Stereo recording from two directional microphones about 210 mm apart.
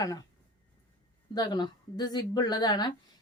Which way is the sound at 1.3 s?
20° left (ahead or behind).